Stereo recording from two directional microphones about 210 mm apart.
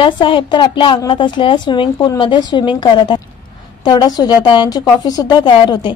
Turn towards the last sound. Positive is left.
turn(degrees=20)  # may be behind; listen again after turning